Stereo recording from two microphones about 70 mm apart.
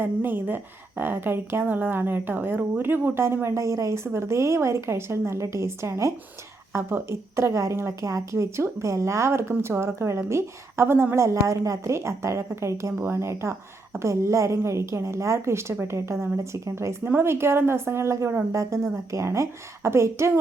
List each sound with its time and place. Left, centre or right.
0.0 s speech: right
18.5 s speech: right